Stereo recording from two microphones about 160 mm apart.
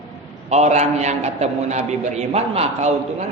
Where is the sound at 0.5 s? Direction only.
45° right (ahead or behind).